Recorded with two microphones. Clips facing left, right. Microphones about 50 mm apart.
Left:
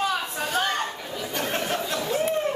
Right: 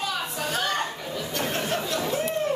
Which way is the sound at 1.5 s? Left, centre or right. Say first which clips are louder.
Even; left.